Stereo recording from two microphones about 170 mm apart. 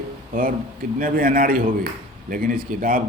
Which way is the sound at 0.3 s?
55° right (ahead or behind).